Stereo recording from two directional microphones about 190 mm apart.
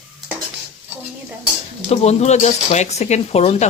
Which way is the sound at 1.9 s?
35° left (ahead or behind).